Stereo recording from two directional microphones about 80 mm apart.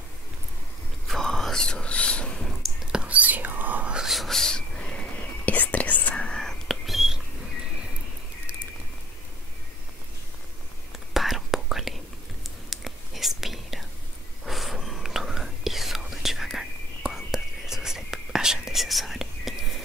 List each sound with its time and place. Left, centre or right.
1.0 s whispering: centre
2.9 s whispering: centre
4.0 s whispering: centre
10.9 s whispering: centre